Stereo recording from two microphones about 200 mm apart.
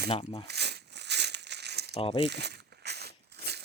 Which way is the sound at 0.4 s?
55° right (ahead or behind).